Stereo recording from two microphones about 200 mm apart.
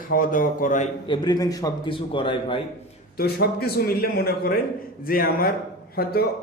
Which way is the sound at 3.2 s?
50° left (ahead or behind).